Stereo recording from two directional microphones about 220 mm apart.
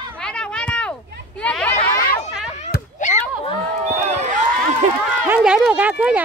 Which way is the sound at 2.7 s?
35° left (ahead or behind).